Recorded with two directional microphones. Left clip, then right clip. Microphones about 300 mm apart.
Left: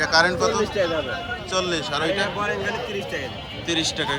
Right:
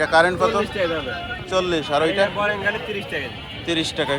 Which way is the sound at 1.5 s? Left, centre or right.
Centre.